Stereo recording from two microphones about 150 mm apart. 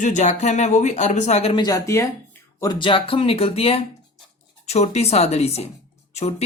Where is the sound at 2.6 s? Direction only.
30° left (ahead or behind).